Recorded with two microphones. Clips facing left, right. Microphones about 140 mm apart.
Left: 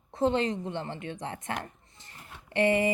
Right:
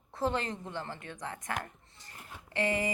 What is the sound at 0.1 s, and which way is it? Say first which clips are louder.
Speech: left 6 dB; 20° left (ahead or behind).